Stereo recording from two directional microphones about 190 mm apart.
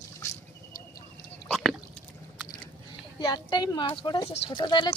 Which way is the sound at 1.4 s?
Centre (ahead or behind).